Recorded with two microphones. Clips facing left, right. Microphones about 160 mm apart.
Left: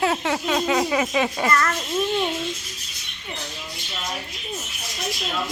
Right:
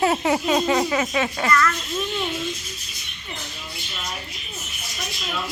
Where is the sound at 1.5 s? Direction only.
35° left (ahead or behind).